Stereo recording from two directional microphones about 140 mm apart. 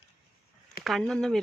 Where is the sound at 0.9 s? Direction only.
Centre (ahead or behind).